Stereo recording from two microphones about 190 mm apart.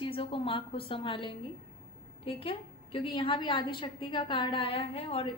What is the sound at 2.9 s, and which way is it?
Speech, 30° left (ahead or behind).